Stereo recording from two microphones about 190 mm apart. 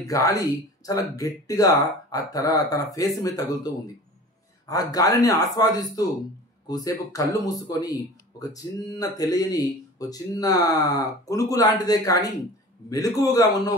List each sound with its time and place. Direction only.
0.0 s speech: 15° left (ahead or behind)